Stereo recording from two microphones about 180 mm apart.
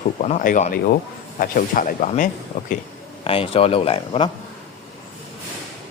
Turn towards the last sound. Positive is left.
turn(degrees=30)  # may be behind; listen again after turning